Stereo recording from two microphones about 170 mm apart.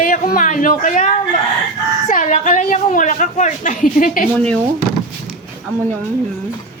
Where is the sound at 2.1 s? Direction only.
50° left (ahead or behind).